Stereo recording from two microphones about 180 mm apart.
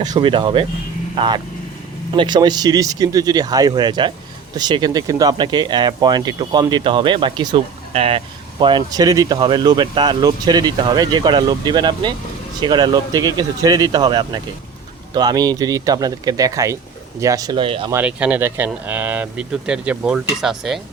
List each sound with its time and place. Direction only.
0.0 s speech: 25° right (ahead or behind)
17.9 s speech: 5° right (ahead or behind)